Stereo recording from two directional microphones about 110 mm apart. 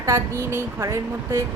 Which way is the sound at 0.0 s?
25° right (ahead or behind).